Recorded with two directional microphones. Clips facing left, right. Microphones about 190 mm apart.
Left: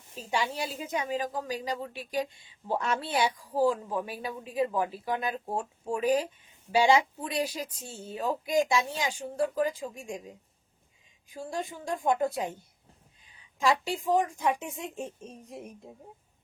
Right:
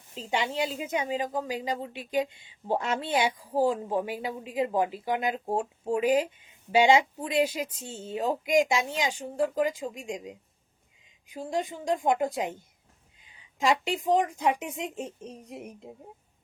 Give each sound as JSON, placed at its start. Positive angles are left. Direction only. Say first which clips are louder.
{"t": 0.1, "sound": "a woman's voice", "louder": "right 1 dB", "side_deg": -20}
{"t": 13.6, "sound": "a woman's voice", "louder": "right 1 dB", "side_deg": -20}